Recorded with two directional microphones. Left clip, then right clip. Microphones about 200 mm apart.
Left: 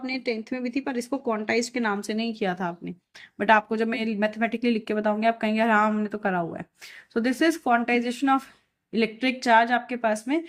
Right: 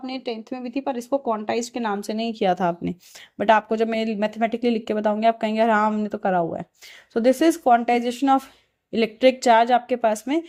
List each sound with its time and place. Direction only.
0.0 s speech: 20° right (ahead or behind)